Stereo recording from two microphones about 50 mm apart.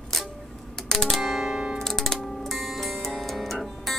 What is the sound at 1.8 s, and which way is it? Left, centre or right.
Music, centre.